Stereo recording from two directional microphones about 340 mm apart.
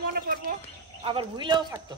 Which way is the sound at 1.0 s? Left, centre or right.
Centre.